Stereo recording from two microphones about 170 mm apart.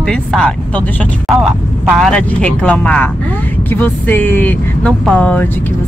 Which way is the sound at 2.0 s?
5° left (ahead or behind).